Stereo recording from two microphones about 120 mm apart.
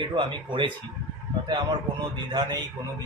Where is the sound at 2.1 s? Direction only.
35° right (ahead or behind).